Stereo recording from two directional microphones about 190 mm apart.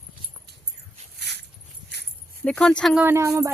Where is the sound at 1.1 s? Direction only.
60° right (ahead or behind).